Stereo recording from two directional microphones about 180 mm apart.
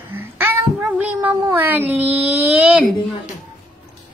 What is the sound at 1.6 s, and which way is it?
Speech, 10° right (ahead or behind).